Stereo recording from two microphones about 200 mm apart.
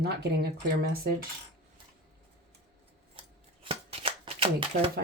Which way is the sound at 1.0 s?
50° right (ahead or behind).